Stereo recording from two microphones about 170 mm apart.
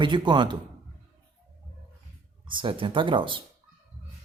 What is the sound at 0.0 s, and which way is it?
Speech, 25° right (ahead or behind).